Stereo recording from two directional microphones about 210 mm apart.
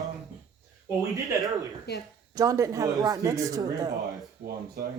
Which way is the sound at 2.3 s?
15° right (ahead or behind).